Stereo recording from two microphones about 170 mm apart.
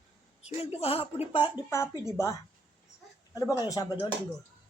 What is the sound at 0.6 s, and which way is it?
Speech, 35° left (ahead or behind).